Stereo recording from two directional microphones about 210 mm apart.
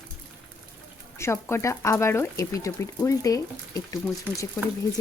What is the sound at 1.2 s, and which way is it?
Speech, 10° left (ahead or behind).